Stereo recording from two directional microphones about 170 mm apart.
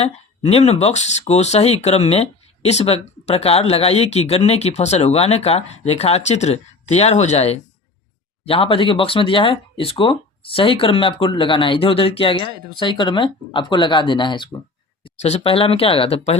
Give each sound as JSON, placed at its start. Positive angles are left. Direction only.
{"t": 0.0, "sound": "speech", "side_deg": 35}